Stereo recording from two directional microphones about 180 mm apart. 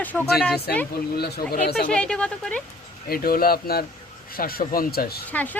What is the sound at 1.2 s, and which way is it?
Speech, 55° left (ahead or behind).